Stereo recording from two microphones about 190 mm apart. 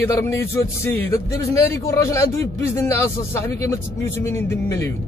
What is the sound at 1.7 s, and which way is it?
A man's voice, 15° left (ahead or behind).